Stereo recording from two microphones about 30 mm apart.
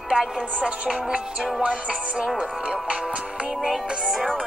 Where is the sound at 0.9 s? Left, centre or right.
Right.